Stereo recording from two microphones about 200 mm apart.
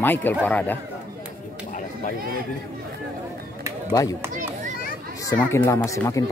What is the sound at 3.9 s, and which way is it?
Speech, 15° left (ahead or behind).